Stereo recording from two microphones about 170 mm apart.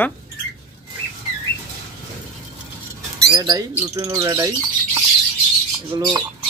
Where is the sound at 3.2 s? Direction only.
25° right (ahead or behind).